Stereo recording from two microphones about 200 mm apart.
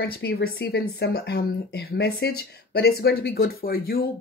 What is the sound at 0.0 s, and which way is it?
Speech, 50° left (ahead or behind).